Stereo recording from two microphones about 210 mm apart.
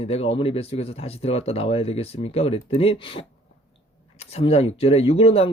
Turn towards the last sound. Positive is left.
turn(degrees=30)  # may be behind; listen again after turning